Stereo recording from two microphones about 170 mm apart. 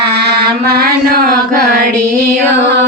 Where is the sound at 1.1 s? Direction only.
60° right (ahead or behind).